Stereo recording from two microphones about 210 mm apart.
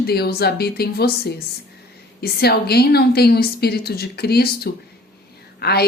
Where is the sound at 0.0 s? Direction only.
50° left (ahead or behind).